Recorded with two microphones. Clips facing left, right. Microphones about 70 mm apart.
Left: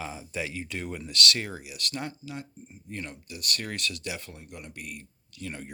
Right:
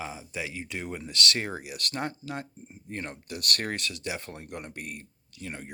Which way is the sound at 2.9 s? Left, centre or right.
Right.